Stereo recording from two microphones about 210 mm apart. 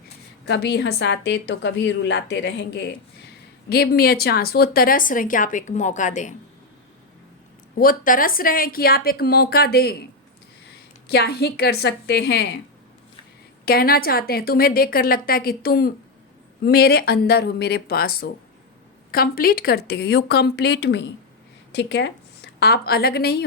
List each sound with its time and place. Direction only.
0.4 s a woman's voice: 55° left (ahead or behind); by 6.3 s 35° left (ahead or behind)
7.8 s a woman's voice: 40° left (ahead or behind)
11.1 s a woman's voice: 50° left (ahead or behind)
13.7 s a woman's voice: 45° left (ahead or behind)